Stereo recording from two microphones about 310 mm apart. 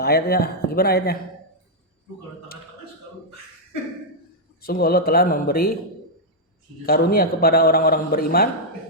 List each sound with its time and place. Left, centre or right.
0.0 s a man's voice: left
4.6 s a man's voice: left
6.8 s a man's voice: left